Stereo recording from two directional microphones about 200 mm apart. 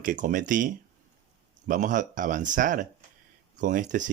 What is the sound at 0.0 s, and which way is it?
A man's voice, 40° right (ahead or behind).